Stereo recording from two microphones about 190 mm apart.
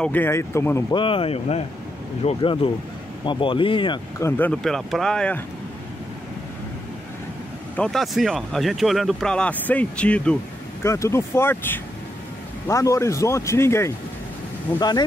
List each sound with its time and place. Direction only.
0.0 s speech: 10° left (ahead or behind)
0.9 s speech: 30° left (ahead or behind)
4.2 s speech: 10° left (ahead or behind)
7.7 s speech: 5° left (ahead or behind); by 15.0 s 20° left (ahead or behind)